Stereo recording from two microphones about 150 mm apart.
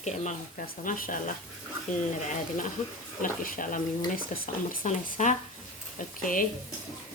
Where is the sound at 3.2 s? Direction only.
65° left (ahead or behind).